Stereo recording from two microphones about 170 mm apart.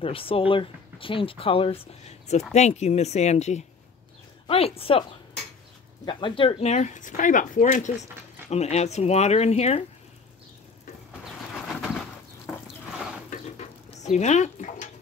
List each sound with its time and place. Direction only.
0.0 s speech: 30° left (ahead or behind)
6.0 s speech: 30° left (ahead or behind)
13.3 s a sound: 40° left (ahead or behind)